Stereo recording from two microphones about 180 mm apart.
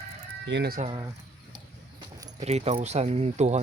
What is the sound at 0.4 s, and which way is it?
Speech, 85° right.